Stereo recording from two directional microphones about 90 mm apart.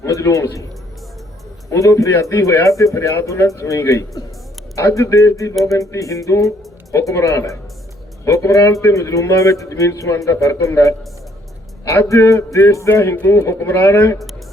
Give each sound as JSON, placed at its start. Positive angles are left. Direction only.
{"t": 0.0, "sound": "a man's voice", "side_deg": 35}
{"t": 1.7, "sound": "a man's voice", "side_deg": 35}
{"t": 12.0, "sound": "a man's voice", "side_deg": 35}